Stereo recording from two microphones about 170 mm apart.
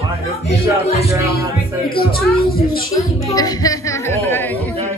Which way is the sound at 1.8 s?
65° left (ahead or behind).